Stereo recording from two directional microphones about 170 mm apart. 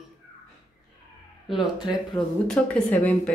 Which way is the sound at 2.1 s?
5° left (ahead or behind).